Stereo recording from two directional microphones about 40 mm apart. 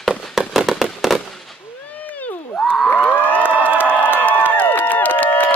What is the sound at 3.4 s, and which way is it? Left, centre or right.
Crowd, right.